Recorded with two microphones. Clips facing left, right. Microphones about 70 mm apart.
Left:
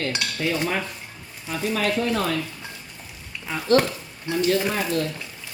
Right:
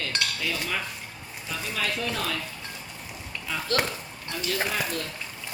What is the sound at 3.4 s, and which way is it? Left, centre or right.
Speech, left.